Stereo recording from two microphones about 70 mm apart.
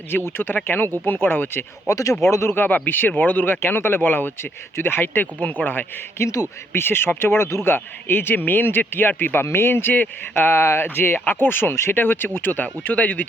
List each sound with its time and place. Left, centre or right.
0.3 s speech: left
1.9 s speech: left
2.3 s speech: left
6.1 s speech: left